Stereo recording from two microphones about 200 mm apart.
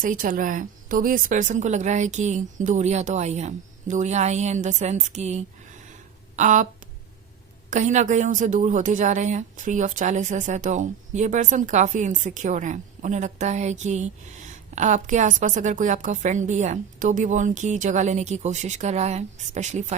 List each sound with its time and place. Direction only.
0.0 s a woman's voice: 45° right (ahead or behind)
7.7 s a woman's voice: 35° right (ahead or behind)